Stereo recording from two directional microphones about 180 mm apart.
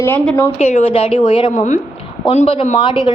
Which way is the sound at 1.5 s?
45° left (ahead or behind).